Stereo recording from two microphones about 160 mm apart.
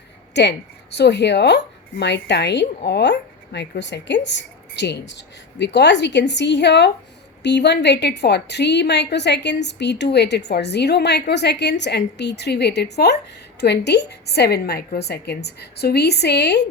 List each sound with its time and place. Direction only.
0.3 s a woman's voice: 90° left